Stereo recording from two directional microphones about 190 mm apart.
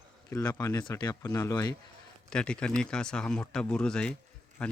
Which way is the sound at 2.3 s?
5° left (ahead or behind).